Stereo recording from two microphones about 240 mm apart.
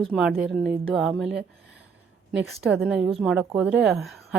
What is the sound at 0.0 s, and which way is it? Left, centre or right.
Speech, centre.